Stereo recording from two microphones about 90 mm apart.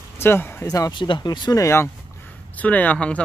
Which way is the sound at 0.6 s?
40° left (ahead or behind).